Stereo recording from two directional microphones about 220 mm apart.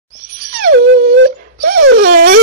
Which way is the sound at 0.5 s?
45° right (ahead or behind).